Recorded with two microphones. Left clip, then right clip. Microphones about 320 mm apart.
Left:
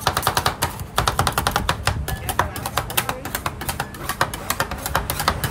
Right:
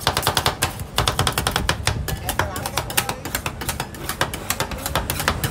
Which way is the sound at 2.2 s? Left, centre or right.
Centre.